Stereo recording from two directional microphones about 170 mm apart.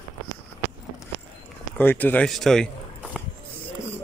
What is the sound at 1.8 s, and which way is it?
Speech, 10° left (ahead or behind).